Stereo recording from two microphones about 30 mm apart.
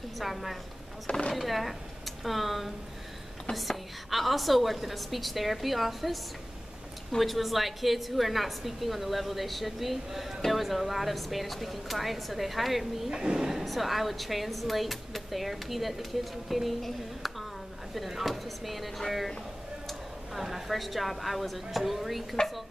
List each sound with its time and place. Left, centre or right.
0.2 s speech: centre
7.2 s speech: centre
13.2 s speech: centre
13.7 s speech: centre
19.9 s a woman's voice: centre